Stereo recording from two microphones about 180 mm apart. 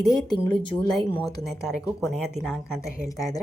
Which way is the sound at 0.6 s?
30° left (ahead or behind).